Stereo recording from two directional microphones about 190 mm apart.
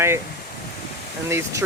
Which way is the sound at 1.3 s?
15° right (ahead or behind).